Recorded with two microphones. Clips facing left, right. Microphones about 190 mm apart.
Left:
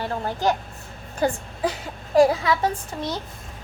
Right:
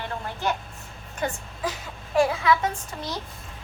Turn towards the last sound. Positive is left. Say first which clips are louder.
# left 4 dB
turn(degrees=35)  # may be behind; listen again after turning